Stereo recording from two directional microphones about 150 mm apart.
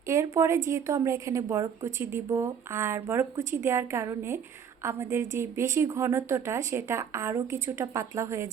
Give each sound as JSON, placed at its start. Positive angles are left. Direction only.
{"t": 0.1, "sound": "a woman's voice", "side_deg": -20}